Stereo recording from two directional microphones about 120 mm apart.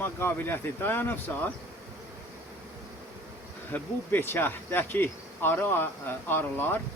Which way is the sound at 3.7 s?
15° left (ahead or behind).